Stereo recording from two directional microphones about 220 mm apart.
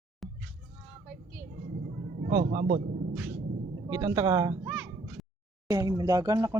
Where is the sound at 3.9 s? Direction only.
15° right (ahead or behind).